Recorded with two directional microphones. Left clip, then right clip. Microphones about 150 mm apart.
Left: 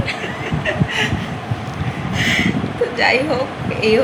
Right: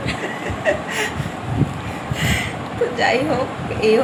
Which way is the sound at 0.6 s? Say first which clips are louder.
Even; 70° right (ahead or behind).